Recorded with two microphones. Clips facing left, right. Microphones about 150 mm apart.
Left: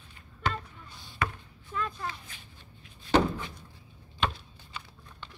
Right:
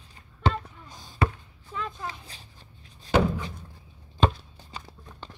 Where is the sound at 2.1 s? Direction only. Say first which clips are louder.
Right 1 dB; 35° right (ahead or behind).